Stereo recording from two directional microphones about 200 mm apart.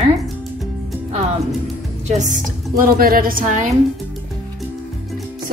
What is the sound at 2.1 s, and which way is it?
A woman's voice, 35° right (ahead or behind).